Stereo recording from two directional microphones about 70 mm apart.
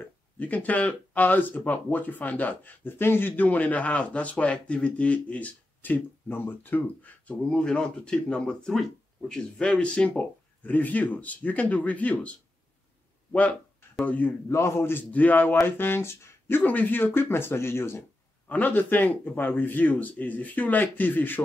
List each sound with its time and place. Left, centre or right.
0.0 s speech: left
14.5 s speech: left
15.1 s speech: left
18.5 s speech: left